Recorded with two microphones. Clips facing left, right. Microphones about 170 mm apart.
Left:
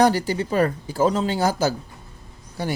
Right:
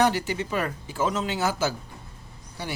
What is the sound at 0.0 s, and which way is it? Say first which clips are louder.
Speech: left 5 dB; 40° left (ahead or behind).